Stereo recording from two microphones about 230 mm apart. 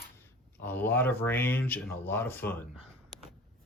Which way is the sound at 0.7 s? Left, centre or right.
Centre.